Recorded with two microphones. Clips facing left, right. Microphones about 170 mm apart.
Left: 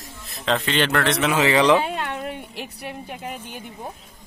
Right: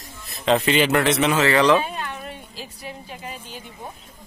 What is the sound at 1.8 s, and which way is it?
A woman's voice, 70° left (ahead or behind).